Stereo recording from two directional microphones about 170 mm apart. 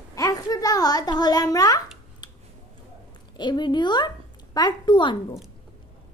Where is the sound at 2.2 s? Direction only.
25° left (ahead or behind).